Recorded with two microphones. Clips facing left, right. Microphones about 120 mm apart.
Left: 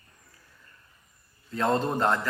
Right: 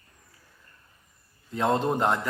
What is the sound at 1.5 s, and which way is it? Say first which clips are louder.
Speech: right 1 dB; 15° right (ahead or behind).